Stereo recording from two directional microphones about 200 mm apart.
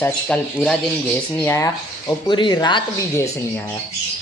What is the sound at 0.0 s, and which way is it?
Speech, 5° left (ahead or behind).